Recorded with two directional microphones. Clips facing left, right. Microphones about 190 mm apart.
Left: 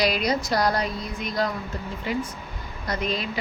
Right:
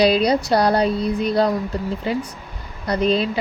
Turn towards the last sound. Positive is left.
turn(degrees=-30)  # may be behind; listen again after turning